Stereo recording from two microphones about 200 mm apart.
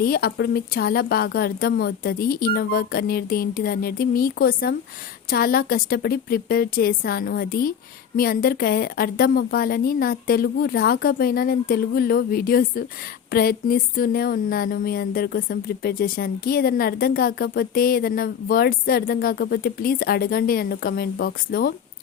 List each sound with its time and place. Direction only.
0.0 s speech: 50° left (ahead or behind)